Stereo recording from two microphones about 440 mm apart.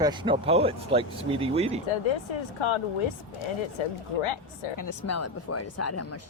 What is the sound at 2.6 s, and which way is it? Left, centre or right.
Speech, left.